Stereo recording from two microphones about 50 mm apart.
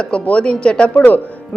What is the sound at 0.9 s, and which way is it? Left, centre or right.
Speech, left.